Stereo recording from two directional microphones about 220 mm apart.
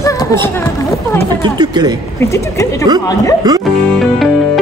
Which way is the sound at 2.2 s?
15° left (ahead or behind).